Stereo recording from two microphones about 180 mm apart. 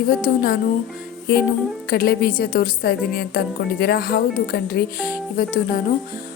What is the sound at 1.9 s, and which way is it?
A woman's voice, 55° left (ahead or behind).